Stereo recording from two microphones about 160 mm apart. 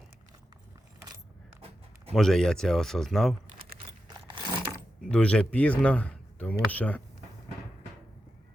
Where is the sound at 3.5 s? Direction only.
70° right (ahead or behind).